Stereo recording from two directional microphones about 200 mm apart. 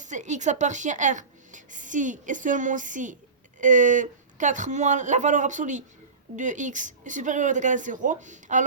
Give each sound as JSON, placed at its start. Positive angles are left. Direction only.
{"t": 0.0, "sound": "speech", "side_deg": -40}